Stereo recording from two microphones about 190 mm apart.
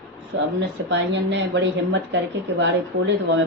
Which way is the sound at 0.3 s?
75° right (ahead or behind).